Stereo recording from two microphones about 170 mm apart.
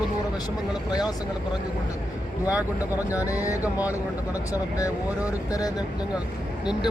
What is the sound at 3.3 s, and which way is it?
Speech, 20° left (ahead or behind).